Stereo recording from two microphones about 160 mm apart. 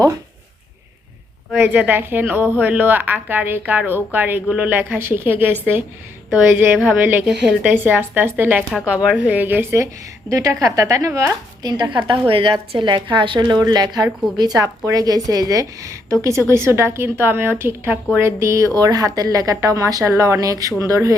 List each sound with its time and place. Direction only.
1.5 s a woman's voice: 10° right (ahead or behind)